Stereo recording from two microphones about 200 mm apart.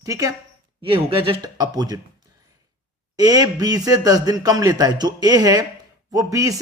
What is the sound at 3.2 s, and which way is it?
A man's voice, 20° right (ahead or behind).